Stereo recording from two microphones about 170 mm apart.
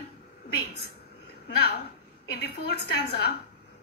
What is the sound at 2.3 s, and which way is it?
A woman's voice, 75° left (ahead or behind).